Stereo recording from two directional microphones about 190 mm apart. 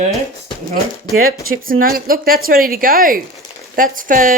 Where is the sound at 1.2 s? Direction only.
50° right (ahead or behind).